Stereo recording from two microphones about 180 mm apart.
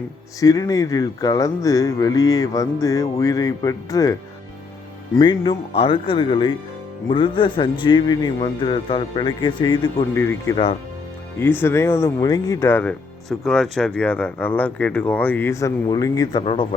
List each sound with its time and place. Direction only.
0.3 s a man's voice: 20° left (ahead or behind)
10.2 s speech: 15° left (ahead or behind)
16.4 s a man's voice: 35° left (ahead or behind)